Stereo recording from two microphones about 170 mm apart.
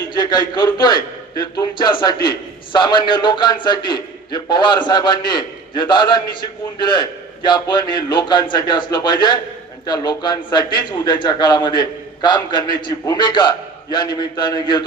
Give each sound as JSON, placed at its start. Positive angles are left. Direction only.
{"t": 0.1, "sound": "a man's voice", "side_deg": 25}